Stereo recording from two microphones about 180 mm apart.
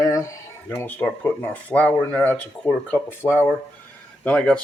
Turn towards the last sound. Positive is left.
turn(degrees=5)  # may be behind; listen again after turning